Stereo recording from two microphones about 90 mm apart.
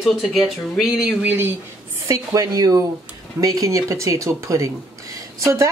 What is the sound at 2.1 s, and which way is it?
Speech, 40° right (ahead or behind).